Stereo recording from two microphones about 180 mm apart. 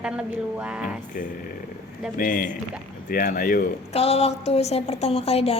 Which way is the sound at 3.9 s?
35° left (ahead or behind).